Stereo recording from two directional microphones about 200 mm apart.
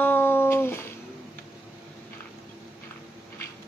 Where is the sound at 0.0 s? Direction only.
10° left (ahead or behind).